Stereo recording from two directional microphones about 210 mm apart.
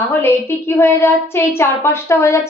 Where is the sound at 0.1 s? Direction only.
10° left (ahead or behind).